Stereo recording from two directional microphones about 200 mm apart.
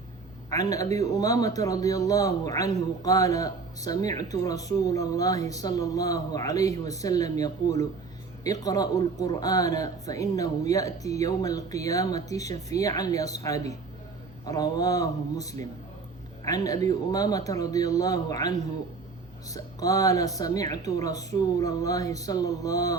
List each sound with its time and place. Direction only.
0.5 s a man's voice: 15° left (ahead or behind)